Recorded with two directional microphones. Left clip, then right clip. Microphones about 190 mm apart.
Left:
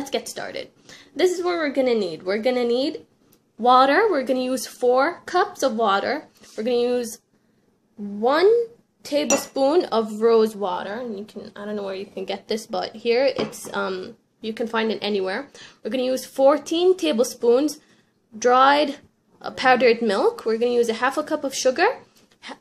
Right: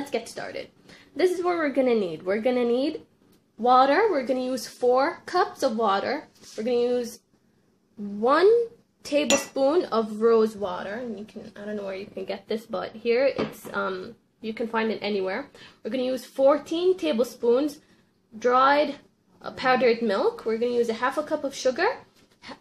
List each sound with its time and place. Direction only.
0.1 s a woman's voice: 5° left (ahead or behind)
3.6 s a woman's voice: 10° left (ahead or behind)
8.2 s a woman's voice: 5° right (ahead or behind); by 21.9 s 15° left (ahead or behind)